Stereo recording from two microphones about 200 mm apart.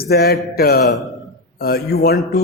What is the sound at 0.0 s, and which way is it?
Speech, 50° left (ahead or behind).